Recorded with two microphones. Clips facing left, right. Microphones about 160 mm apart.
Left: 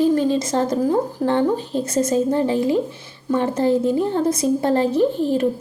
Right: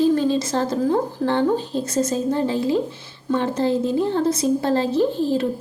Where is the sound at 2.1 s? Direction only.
15° left (ahead or behind).